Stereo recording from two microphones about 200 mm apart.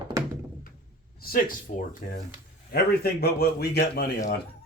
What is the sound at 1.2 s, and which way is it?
A man's voice, 45° left (ahead or behind).